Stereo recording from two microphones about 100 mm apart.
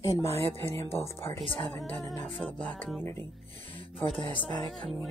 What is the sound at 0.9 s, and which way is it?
Speech, 25° left (ahead or behind).